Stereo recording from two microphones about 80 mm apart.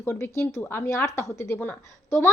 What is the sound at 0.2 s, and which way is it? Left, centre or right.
Speech, left.